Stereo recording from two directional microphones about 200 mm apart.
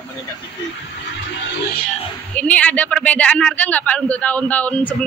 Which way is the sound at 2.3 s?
5° left (ahead or behind).